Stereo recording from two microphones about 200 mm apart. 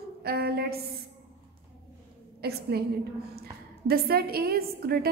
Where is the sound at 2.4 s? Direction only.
55° right (ahead or behind).